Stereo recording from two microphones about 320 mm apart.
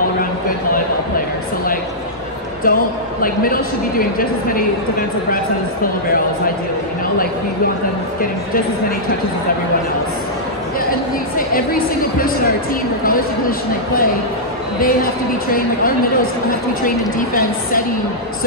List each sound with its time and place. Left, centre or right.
2.6 s speech: left
10.9 s speech: left
13.0 s speech: left
16.8 s speech: left